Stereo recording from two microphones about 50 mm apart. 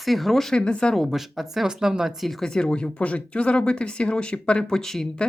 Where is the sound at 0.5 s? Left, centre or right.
Centre.